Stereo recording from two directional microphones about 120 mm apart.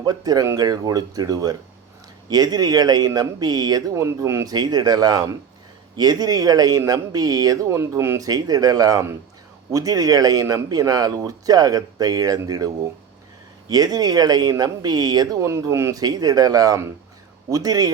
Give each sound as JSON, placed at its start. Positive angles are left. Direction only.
{"t": 0.0, "sound": "speech", "side_deg": -35}